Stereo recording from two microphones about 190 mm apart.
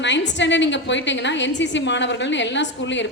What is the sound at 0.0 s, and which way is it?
A woman's voice, 70° left (ahead or behind).